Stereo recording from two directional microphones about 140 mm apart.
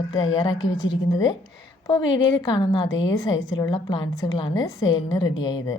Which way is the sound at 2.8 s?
25° left (ahead or behind).